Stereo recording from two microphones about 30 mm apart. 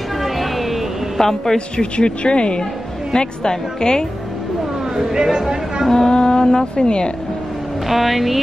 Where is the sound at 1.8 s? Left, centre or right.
Left.